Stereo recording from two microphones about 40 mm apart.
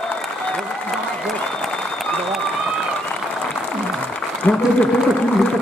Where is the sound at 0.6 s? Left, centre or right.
Centre.